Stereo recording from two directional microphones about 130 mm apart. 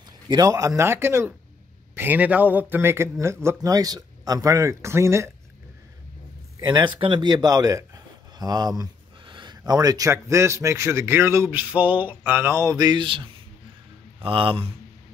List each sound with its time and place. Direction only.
0.3 s a man's voice: 30° right (ahead or behind)
6.6 s a man's voice: 35° right (ahead or behind)